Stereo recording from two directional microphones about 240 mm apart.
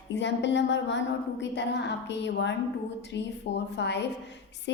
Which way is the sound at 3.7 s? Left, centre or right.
Left.